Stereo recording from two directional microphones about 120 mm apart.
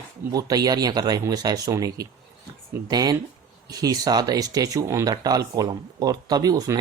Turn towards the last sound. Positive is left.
turn(degrees=-30)  # may be behind; listen again after turning